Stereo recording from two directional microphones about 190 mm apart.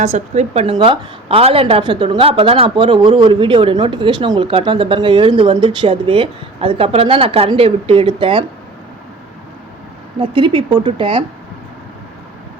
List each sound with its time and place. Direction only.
0.0 s a woman's voice: 35° right (ahead or behind)
10.2 s a woman's voice: 25° right (ahead or behind)